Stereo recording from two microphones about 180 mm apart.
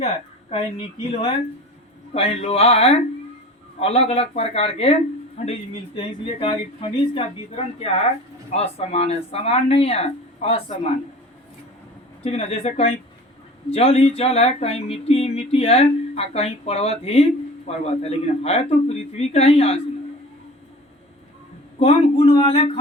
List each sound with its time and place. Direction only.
0.5 s speech: 30° left (ahead or behind)
6.4 s speech: 30° left (ahead or behind)
12.2 s speech: 35° left (ahead or behind)
21.8 s speech: 35° left (ahead or behind)